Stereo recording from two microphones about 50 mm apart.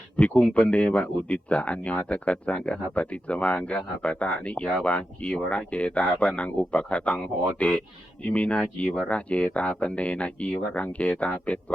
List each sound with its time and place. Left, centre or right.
0.2 s speech: left